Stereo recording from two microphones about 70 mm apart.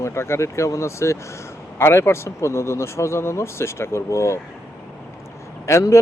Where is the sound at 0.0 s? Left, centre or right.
Left.